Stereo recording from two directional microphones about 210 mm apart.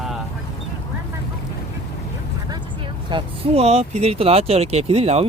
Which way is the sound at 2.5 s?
20° right (ahead or behind).